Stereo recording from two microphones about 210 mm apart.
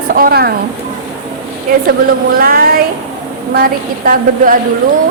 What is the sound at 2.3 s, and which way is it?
A woman's voice, 45° right (ahead or behind).